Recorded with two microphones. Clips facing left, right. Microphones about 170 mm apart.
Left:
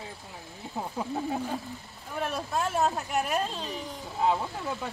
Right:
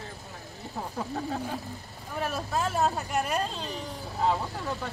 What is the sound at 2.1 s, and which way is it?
Speech, centre (ahead or behind).